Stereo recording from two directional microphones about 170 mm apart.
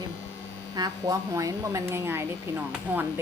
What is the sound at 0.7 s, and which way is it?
Speech, 20° right (ahead or behind).